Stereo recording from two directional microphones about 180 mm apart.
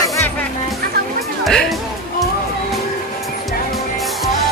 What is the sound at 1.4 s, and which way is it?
Music, centre (ahead or behind).